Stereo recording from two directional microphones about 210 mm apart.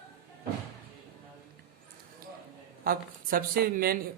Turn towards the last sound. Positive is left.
turn(degrees=-45)  # may be behind; listen again after turning